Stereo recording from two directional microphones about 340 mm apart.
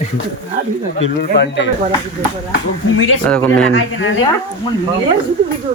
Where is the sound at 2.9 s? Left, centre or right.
Left.